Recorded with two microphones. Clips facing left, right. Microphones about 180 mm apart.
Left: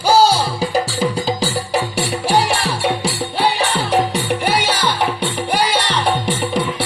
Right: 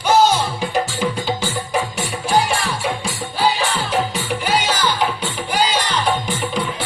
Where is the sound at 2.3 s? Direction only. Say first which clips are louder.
Even; 65° left (ahead or behind).